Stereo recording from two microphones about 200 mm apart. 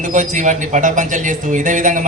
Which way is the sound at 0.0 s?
40° right (ahead or behind).